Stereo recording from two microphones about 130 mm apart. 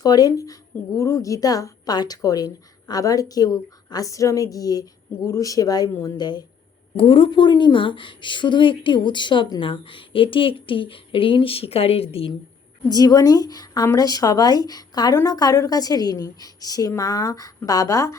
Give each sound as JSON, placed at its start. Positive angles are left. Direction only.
{"t": 0.0, "sound": "a woman's voice", "side_deg": 30}
{"t": 12.9, "sound": "a woman's voice", "side_deg": 30}